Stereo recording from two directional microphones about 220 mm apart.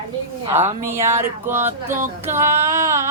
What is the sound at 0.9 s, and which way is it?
Female singing, 10° right (ahead or behind).